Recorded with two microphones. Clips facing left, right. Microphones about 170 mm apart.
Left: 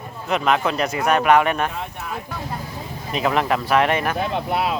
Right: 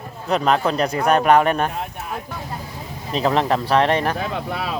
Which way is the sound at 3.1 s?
30° right (ahead or behind).